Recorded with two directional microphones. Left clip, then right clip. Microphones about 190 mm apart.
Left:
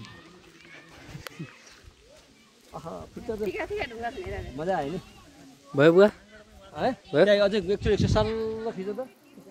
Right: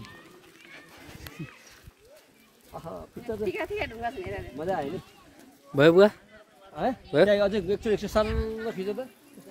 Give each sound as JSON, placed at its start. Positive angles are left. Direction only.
{"t": 2.7, "sound": "a sound", "side_deg": 0}
{"t": 3.3, "sound": "speech", "side_deg": -10}
{"t": 3.5, "sound": "speech", "side_deg": -55}
{"t": 4.6, "sound": "speech", "side_deg": 0}
{"t": 7.8, "sound": "speech", "side_deg": -30}
{"t": 8.2, "sound": "speech", "side_deg": -55}